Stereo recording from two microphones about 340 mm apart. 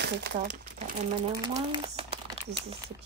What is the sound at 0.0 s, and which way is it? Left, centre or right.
Speech, right.